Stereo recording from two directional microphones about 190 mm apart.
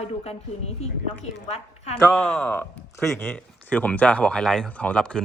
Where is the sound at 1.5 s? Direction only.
35° left (ahead or behind).